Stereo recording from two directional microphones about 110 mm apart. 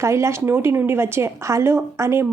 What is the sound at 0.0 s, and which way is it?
Speech, 25° right (ahead or behind).